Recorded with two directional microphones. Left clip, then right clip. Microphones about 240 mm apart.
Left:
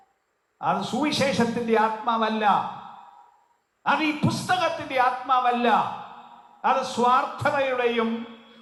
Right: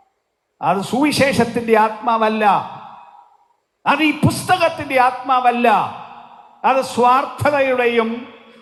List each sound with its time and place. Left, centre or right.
0.6 s a man's voice: right
3.8 s a man's voice: right